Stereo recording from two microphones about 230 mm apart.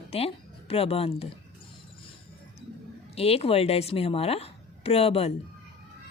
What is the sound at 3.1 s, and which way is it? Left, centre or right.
A woman's voice, left.